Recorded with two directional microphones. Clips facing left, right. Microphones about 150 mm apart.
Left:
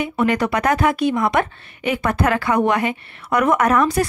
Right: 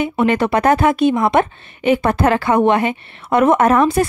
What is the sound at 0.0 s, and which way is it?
Speech, 25° right (ahead or behind).